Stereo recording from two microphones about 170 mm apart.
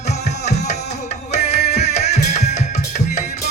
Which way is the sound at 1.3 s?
40° left (ahead or behind).